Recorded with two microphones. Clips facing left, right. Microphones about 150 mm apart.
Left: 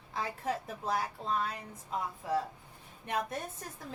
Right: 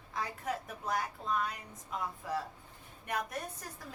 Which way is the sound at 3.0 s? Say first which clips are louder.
Left 2 dB; 25° left (ahead or behind).